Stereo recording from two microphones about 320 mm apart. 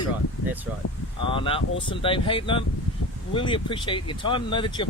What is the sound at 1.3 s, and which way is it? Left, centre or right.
Speech, centre.